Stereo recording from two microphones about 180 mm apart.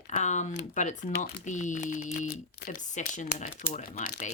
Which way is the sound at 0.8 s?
45° left (ahead or behind).